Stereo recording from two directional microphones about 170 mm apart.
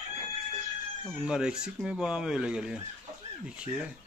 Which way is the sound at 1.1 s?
5° right (ahead or behind).